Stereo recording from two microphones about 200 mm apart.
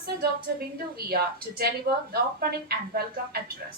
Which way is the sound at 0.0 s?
50° right (ahead or behind).